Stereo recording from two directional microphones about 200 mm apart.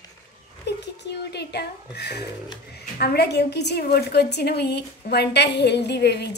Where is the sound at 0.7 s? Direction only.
55° left (ahead or behind).